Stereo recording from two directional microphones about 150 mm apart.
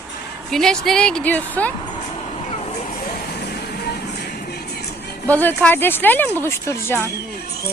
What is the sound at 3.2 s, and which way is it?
Music, 90° left.